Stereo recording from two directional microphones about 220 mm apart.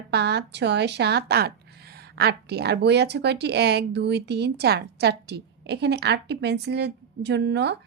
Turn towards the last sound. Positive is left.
turn(degrees=-50)  # may be behind; listen again after turning